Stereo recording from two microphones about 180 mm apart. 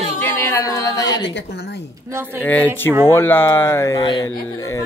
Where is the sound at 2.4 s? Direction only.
10° left (ahead or behind).